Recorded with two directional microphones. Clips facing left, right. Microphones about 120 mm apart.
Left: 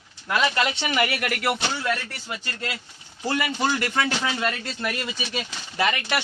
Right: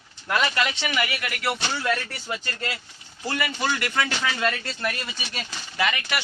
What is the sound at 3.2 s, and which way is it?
Speech, 25° left (ahead or behind).